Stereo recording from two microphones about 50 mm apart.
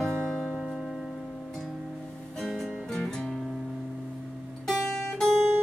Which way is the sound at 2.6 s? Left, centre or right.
Centre.